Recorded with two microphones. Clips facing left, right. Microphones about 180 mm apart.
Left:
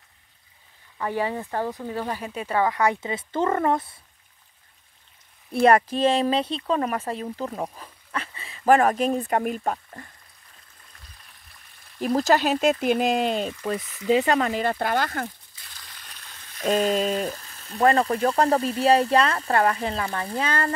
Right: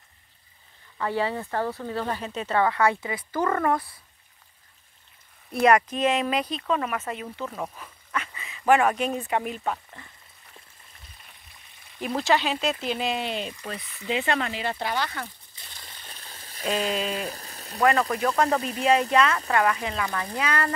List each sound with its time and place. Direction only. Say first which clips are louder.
0.9 s speech: even; 15° left (ahead or behind)
5.5 s speech: left 2 dB; 30° left (ahead or behind)
12.2 s speech: left 3 dB; 45° left (ahead or behind)
15.7 s a sound: right 2 dB; 25° right (ahead or behind)
16.6 s speech: left 5 dB; 40° left (ahead or behind)
17.4 s frying: right 3 dB; 35° right (ahead or behind)
17.7 s speech: left 2 dB; 35° left (ahead or behind)